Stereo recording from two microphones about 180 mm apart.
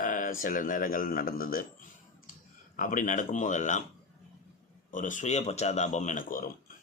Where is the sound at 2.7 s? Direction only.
50° left (ahead or behind).